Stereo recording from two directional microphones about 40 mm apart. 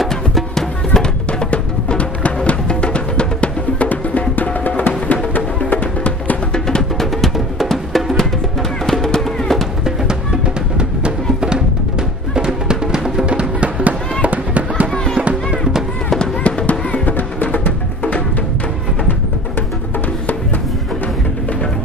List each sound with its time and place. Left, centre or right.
0.6 s music: centre
1.4 s music: left
6.5 s music: centre
7.0 s music: centre
9.8 s music: centre
13.2 s music: right
14.2 s fireworks: right
16.6 s music: left